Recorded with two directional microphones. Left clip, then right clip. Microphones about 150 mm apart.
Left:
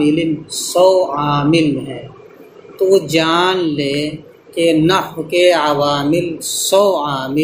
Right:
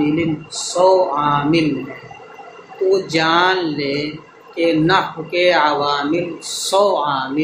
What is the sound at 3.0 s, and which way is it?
Speech, 55° left (ahead or behind).